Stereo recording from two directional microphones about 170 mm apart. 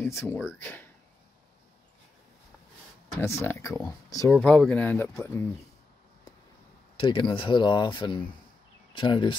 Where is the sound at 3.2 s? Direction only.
15° left (ahead or behind).